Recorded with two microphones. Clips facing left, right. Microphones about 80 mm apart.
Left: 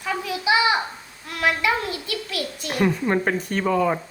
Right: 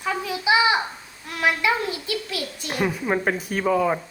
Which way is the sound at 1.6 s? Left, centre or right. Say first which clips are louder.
Even; right.